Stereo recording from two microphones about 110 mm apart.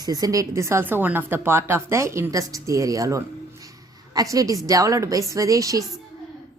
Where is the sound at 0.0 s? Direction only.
35° right (ahead or behind).